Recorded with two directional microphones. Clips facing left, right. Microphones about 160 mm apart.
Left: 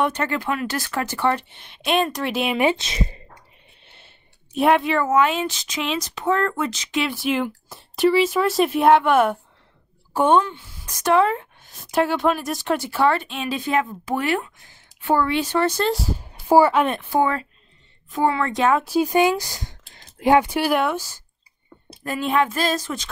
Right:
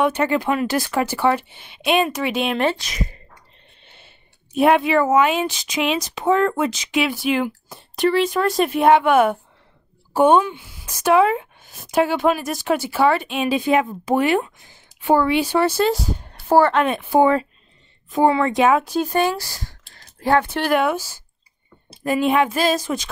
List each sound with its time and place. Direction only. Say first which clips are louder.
0.0 s speech: right 4 dB; 10° right (ahead or behind)
2.6 s speech: left 1 dB; 20° left (ahead or behind)
3.8 s a sound: right 3 dB; centre (ahead or behind)
4.6 s speech: right 3 dB; centre (ahead or behind)
17.1 s speech: right 5 dB; 20° right (ahead or behind)
18.9 s speech: left 2 dB; 10° left (ahead or behind); by 23.0 s 10° right (ahead or behind)